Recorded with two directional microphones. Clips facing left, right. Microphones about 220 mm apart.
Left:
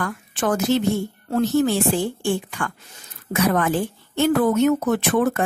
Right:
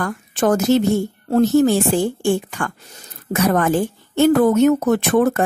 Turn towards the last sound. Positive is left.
turn(degrees=-45)  # may be behind; listen again after turning